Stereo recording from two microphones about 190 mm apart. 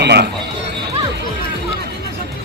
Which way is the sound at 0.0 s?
60° right (ahead or behind).